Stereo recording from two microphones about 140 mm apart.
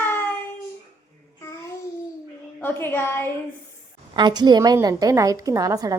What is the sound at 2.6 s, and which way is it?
Speech, 15° left (ahead or behind).